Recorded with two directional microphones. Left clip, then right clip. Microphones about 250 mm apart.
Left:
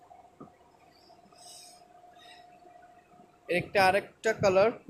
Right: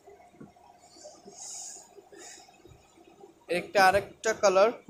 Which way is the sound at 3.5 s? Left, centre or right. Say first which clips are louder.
Right 2 dB; centre.